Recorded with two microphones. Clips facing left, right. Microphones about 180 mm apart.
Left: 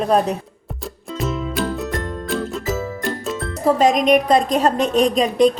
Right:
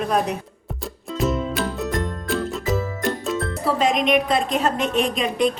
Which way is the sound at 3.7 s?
40° left (ahead or behind).